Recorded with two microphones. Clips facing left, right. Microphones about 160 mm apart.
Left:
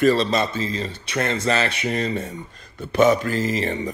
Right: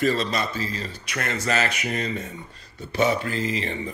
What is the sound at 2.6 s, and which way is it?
Speech, 50° left (ahead or behind).